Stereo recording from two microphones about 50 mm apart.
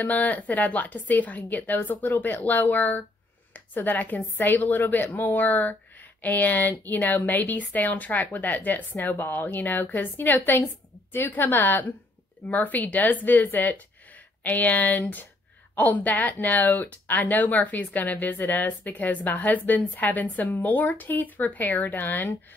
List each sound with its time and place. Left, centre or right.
0.0 s speech: left